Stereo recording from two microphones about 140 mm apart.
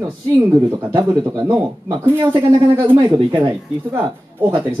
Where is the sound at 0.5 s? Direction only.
30° right (ahead or behind).